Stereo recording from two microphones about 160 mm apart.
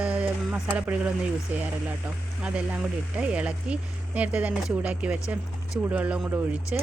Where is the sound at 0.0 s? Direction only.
10° right (ahead or behind).